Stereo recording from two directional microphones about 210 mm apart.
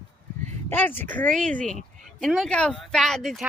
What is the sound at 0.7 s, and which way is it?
Speech, 10° left (ahead or behind).